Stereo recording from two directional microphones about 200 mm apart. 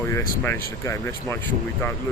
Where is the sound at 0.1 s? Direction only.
10° left (ahead or behind).